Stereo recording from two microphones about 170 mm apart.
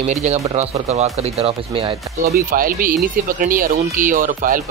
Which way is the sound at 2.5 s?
55° right (ahead or behind).